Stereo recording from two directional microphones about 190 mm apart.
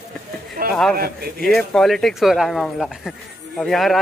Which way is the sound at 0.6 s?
50° right (ahead or behind).